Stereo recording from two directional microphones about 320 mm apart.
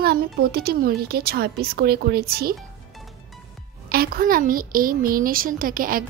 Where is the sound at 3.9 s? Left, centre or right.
Right.